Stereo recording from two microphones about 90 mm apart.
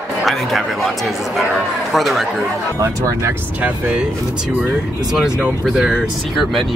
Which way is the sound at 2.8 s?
35° right (ahead or behind).